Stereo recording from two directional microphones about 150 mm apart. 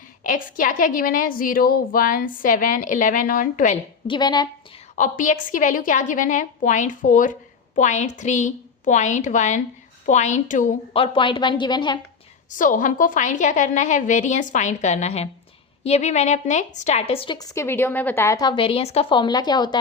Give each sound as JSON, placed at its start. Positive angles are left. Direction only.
{"t": 0.2, "sound": "a woman's voice", "side_deg": 65}
{"t": 4.0, "sound": "speech", "side_deg": 30}
{"t": 4.9, "sound": "a woman's voice", "side_deg": 60}
{"t": 10.9, "sound": "a woman's voice", "side_deg": 35}
{"t": 12.5, "sound": "a woman's voice", "side_deg": 60}
{"t": 17.3, "sound": "a woman's voice", "side_deg": 20}
{"t": 18.3, "sound": "a woman's voice", "side_deg": 30}
{"t": 19.1, "sound": "speech", "side_deg": 30}